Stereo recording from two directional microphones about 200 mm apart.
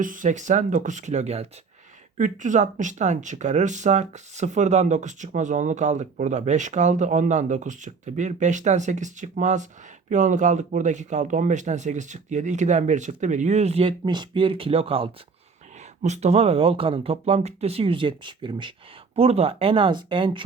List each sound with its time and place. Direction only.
0.0 s speech: 40° right (ahead or behind); by 20.4 s 25° right (ahead or behind)